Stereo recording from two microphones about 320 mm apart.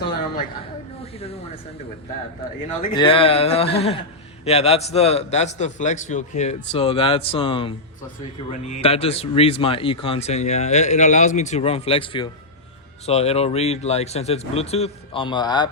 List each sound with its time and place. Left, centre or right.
1.0 s snake: centre
2.9 s a man's voice: centre